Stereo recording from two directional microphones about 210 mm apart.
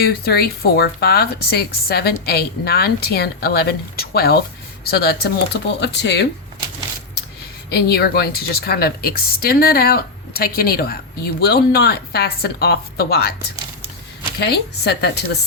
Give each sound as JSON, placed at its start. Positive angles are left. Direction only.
{"t": 0.0, "sound": "a woman's voice", "side_deg": 50}
{"t": 7.7, "sound": "a woman's voice", "side_deg": 50}
{"t": 14.3, "sound": "a woman's voice", "side_deg": 50}